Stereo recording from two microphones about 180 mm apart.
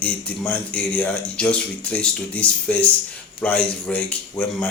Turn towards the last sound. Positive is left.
turn(degrees=10)  # may be behind; listen again after turning